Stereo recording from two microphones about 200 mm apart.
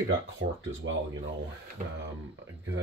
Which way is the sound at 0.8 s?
65° right (ahead or behind).